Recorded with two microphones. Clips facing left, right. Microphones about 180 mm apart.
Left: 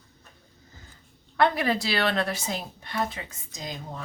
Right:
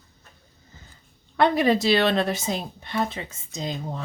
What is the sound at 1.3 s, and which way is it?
Speech, 20° right (ahead or behind).